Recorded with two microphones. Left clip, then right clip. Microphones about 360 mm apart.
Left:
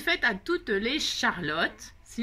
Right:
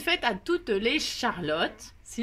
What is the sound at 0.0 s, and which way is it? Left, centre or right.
Speech, centre.